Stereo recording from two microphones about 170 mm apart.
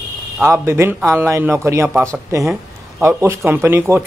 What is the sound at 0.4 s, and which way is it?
A man's voice, 15° right (ahead or behind).